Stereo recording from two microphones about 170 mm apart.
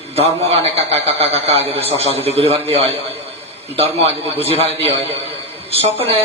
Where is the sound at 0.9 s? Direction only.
35° right (ahead or behind).